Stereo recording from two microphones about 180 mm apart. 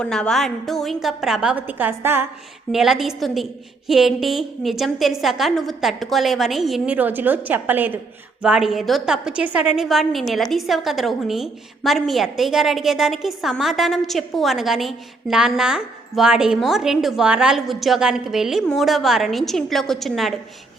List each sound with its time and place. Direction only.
0.0 s a woman's voice: 5° left (ahead or behind); by 2.2 s 10° right (ahead or behind)
2.7 s a woman's voice: centre (ahead or behind)